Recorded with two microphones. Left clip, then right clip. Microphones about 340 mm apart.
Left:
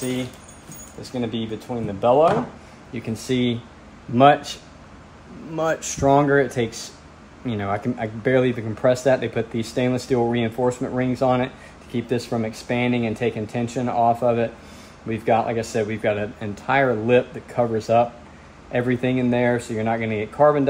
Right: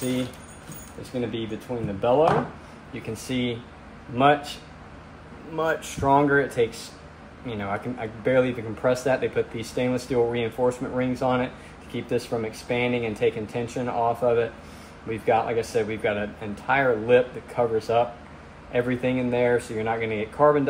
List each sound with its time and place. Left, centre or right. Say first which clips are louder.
2.0 s speech: left 4 dB; left
5.6 s speech: left 3 dB; left